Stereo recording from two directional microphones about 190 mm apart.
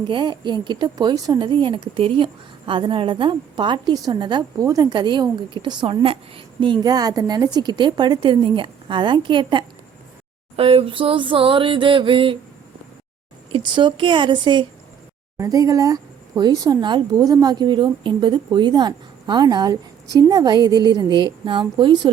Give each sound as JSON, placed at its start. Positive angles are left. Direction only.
{"t": 0.1, "sound": "speech", "side_deg": -25}
{"t": 13.5, "sound": "speech", "side_deg": -25}